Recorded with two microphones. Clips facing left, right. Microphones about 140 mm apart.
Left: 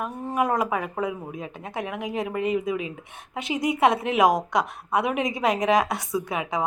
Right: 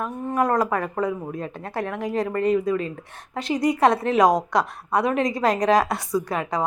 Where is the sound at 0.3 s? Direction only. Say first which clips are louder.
Right 2 dB; 5° left (ahead or behind).